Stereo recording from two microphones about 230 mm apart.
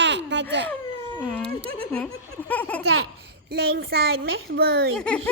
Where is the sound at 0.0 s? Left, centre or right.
Right.